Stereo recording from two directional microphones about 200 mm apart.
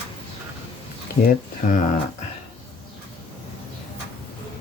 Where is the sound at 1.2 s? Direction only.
45° left (ahead or behind).